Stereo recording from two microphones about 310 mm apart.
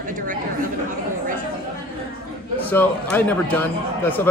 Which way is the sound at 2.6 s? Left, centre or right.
Centre.